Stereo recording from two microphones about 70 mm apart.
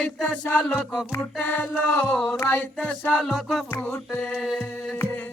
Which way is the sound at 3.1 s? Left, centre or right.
Centre.